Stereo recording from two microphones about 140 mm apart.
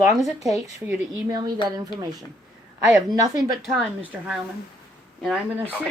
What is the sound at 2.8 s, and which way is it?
Speech, 25° right (ahead or behind).